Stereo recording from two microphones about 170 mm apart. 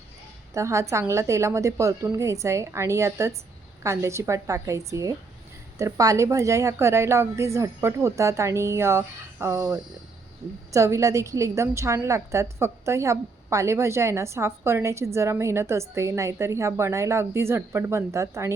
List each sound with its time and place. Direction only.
0.5 s a woman's voice: 15° right (ahead or behind)